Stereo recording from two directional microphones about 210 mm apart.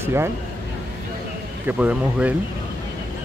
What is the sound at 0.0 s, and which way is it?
Speech, 10° right (ahead or behind).